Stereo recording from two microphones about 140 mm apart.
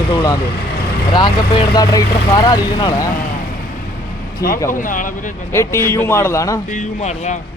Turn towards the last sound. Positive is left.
turn(degrees=55)  # may be behind; listen again after turning